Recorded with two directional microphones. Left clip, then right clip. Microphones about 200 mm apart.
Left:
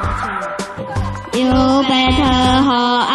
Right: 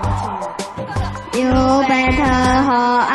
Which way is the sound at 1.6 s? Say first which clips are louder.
Right 1 dB; 90° left.